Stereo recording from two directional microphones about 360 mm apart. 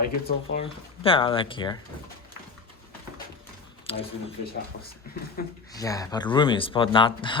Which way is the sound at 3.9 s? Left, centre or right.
Centre.